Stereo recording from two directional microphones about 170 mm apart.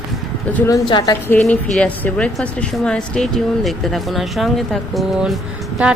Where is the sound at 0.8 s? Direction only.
25° left (ahead or behind).